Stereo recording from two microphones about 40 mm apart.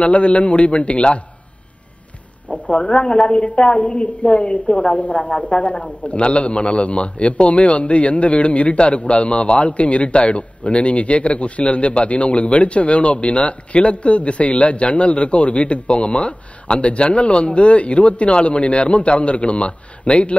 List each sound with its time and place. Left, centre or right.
0.0 s a man's voice: left
2.5 s a woman's voice: left